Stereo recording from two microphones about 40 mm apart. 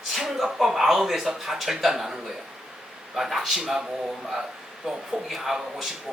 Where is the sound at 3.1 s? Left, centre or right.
Centre.